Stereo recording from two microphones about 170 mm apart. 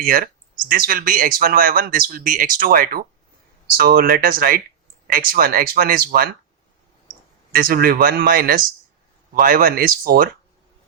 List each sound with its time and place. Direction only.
0.0 s speech: 55° right (ahead or behind)
7.5 s speech: 60° right (ahead or behind)